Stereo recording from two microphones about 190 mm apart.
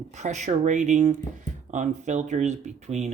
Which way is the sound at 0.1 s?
35° right (ahead or behind).